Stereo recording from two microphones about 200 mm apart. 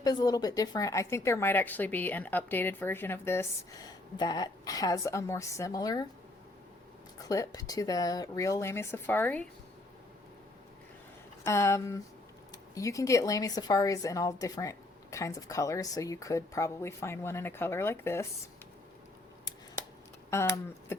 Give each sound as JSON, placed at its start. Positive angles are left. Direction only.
{"t": 0.0, "sound": "speech", "side_deg": 20}
{"t": 7.3, "sound": "speech", "side_deg": 15}
{"t": 11.4, "sound": "speech", "side_deg": 15}
{"t": 20.3, "sound": "speech", "side_deg": 15}